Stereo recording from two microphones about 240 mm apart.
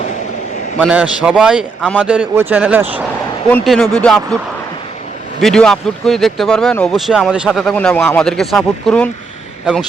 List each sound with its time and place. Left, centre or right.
0.8 s speech: centre
5.4 s speech: centre